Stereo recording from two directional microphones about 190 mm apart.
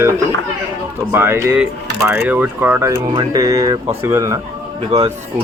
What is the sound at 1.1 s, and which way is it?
Speech, 15° right (ahead or behind).